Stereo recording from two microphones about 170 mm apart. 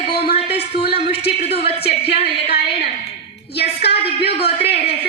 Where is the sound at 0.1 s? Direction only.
70° left (ahead or behind).